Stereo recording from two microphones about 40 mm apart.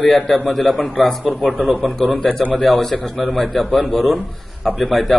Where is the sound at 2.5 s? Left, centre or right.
Centre.